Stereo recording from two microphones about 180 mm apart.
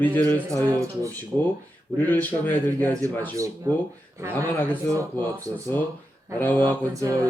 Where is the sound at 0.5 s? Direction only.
15° right (ahead or behind).